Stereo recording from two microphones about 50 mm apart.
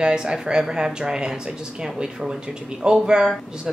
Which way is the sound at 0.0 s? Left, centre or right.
Centre.